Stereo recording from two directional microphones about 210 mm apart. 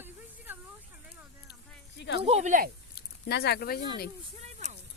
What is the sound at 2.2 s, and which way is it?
Speech, 30° right (ahead or behind).